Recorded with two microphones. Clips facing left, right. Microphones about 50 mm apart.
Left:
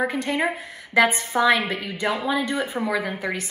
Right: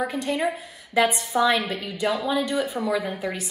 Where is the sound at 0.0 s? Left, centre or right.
Left.